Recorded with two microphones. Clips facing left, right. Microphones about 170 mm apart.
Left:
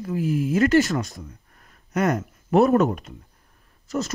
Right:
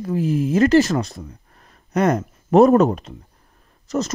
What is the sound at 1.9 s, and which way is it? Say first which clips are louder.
Speech: right 4 dB; 40° right (ahead or behind).